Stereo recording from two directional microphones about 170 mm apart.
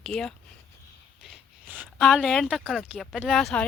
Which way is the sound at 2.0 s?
Centre (ahead or behind).